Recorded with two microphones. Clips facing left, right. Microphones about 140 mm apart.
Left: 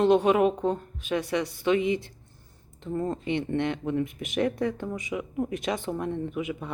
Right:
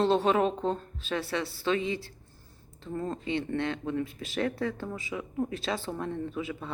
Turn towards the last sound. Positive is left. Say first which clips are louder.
# left 3 dB
turn(degrees=15)  # may be behind; listen again after turning